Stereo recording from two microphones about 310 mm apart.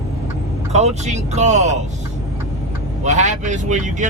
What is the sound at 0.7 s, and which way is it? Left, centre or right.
Speech, right.